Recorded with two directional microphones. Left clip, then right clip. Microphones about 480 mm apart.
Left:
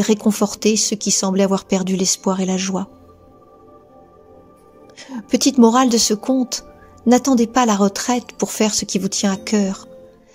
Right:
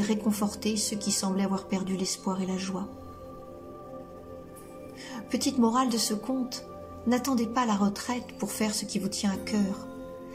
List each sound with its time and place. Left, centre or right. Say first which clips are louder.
0.0 s speech: left 12 dB; centre
5.0 s speech: left 13 dB; centre